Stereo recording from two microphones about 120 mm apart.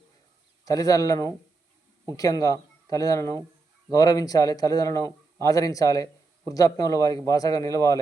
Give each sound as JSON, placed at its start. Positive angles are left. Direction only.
{"t": 0.6, "sound": "a man's voice", "side_deg": 30}